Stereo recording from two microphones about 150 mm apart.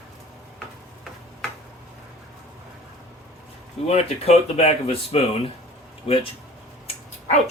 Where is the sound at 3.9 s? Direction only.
45° left (ahead or behind).